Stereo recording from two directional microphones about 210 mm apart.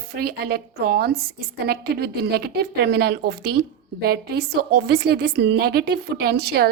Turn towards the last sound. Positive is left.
turn(degrees=-50)  # may be behind; listen again after turning